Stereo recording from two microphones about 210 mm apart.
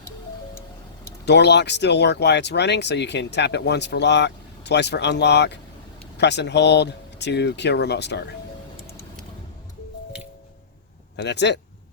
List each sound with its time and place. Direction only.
1.2 s speech: 55° left (ahead or behind)
11.2 s speech: 55° left (ahead or behind)